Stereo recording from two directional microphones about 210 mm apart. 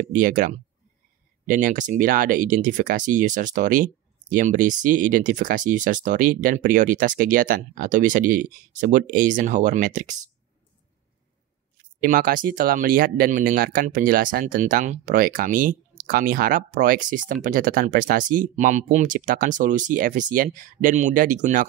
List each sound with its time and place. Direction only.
0.0 s speech: 40° right (ahead or behind)
12.0 s speech: 40° right (ahead or behind)